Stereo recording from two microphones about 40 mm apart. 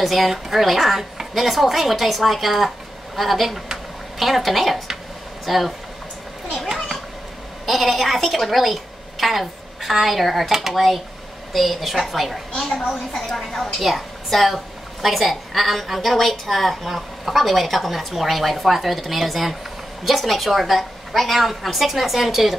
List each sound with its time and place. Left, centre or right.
0.0 s a woman's voice: centre
7.6 s a woman's voice: centre
12.6 s a woman's voice: centre
13.7 s a woman's voice: centre